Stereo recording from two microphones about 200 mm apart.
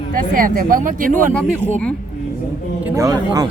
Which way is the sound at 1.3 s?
5° left (ahead or behind).